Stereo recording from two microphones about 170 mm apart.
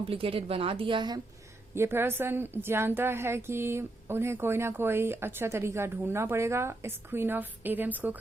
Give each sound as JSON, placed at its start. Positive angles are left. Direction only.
{"t": 0.0, "sound": "a woman's voice", "side_deg": -35}
{"t": 1.7, "sound": "a woman's voice", "side_deg": -15}